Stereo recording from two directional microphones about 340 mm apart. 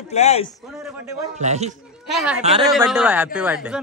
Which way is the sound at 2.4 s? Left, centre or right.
Centre.